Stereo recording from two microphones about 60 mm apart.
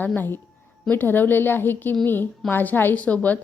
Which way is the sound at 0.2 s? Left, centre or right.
Left.